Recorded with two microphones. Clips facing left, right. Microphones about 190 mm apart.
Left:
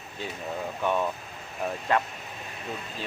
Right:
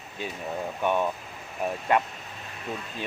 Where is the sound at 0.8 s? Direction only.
15° right (ahead or behind).